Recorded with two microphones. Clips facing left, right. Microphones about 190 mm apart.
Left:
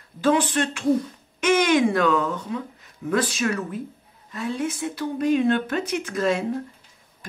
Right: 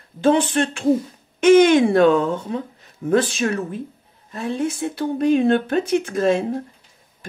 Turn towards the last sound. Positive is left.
turn(degrees=-30)  # may be behind; listen again after turning